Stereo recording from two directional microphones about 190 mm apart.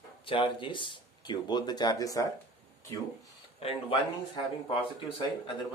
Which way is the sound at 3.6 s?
30° left (ahead or behind).